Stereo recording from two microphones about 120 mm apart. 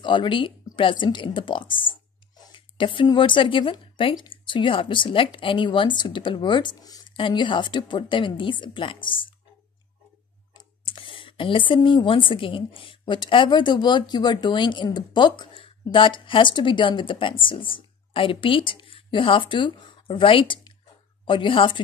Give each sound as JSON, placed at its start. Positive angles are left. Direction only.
{"t": 0.0, "sound": "speech", "side_deg": 45}
{"t": 7.2, "sound": "a woman's voice", "side_deg": 45}
{"t": 10.9, "sound": "a woman's voice", "side_deg": 45}